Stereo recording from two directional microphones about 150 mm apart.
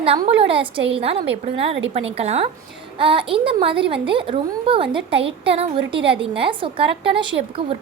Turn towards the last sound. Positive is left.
turn(degrees=-35)  # may be behind; listen again after turning